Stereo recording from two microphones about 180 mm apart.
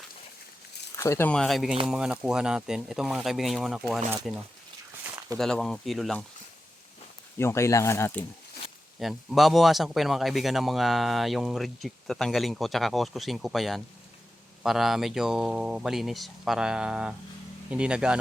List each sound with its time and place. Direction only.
0.9 s speech: 15° left (ahead or behind)
1.3 s speech: centre (ahead or behind)
7.3 s speech: 15° left (ahead or behind)
9.0 s speech: centre (ahead or behind)